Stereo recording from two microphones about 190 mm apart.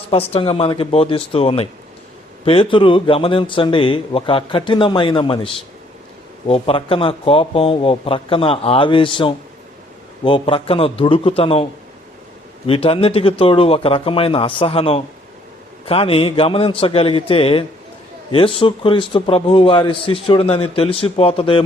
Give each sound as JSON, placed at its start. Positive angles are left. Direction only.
{"t": 0.1, "sound": "a man's voice", "side_deg": 30}
{"t": 6.5, "sound": "a man's voice", "side_deg": 30}
{"t": 12.6, "sound": "a man's voice", "side_deg": 30}